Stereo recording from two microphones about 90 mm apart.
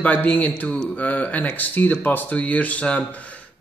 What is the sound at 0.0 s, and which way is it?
Speech, 15° left (ahead or behind).